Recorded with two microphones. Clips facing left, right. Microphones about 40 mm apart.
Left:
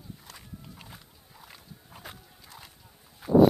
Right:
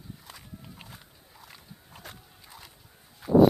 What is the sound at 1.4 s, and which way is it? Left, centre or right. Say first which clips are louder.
Horse: even; centre.